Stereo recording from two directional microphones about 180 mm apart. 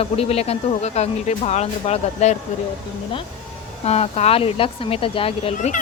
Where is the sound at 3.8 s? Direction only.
35° left (ahead or behind).